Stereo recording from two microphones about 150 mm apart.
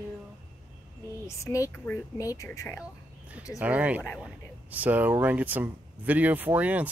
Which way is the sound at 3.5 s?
10° right (ahead or behind).